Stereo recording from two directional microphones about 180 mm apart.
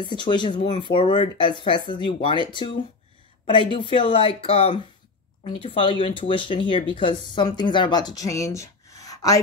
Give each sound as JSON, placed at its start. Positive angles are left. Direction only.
{"t": 0.0, "sound": "speech", "side_deg": 25}